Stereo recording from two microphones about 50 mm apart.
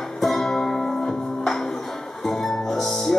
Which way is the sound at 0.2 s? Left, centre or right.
Centre.